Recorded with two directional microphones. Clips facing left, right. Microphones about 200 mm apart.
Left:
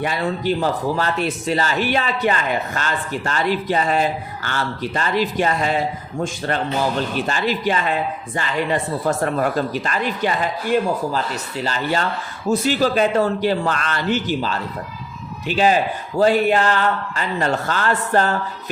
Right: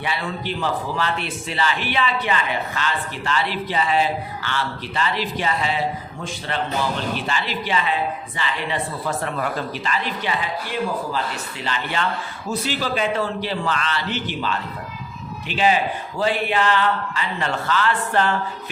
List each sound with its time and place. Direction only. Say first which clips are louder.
0.0 s speech: left 5 dB; 45° left (ahead or behind)